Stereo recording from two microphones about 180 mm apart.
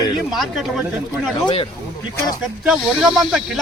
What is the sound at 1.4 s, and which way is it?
Speech, 30° left (ahead or behind).